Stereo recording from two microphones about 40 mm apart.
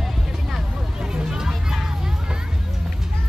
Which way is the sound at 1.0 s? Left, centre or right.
Centre.